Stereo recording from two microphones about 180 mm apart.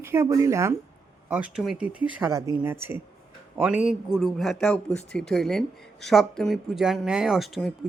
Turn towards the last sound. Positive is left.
turn(degrees=0)  # may be behind; listen again after turning